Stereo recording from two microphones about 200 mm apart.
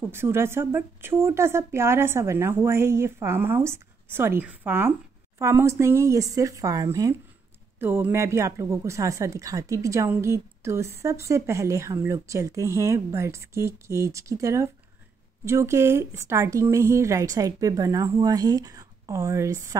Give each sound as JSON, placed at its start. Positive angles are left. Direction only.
{"t": 0.1, "sound": "a woman's voice", "side_deg": -10}